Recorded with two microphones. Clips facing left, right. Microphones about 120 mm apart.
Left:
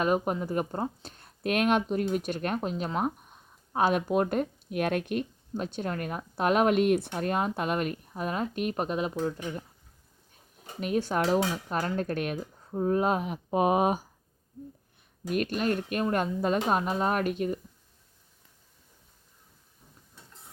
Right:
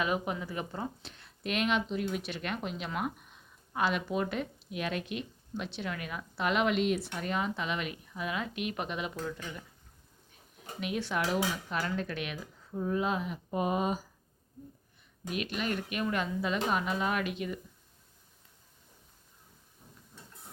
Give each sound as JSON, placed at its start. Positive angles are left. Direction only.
{"t": 0.0, "sound": "speech", "side_deg": 45}
{"t": 10.8, "sound": "speech", "side_deg": 40}
{"t": 15.3, "sound": "speech", "side_deg": 45}